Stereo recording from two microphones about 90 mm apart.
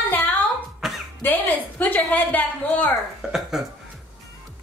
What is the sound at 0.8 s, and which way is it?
Cough, 5° right (ahead or behind).